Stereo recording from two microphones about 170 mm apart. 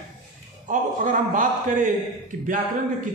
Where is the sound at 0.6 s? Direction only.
50° right (ahead or behind).